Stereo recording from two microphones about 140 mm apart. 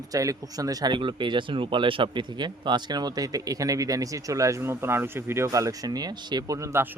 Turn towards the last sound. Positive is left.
turn(degrees=-20)  # may be behind; listen again after turning